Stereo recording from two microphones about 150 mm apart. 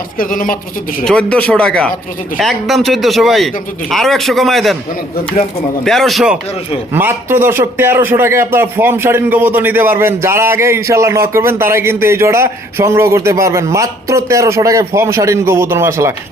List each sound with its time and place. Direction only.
0.2 s speech: 65° left (ahead or behind)
1.0 s speech: 5° left (ahead or behind)
5.8 s speech: centre (ahead or behind)
6.9 s speech: 15° right (ahead or behind)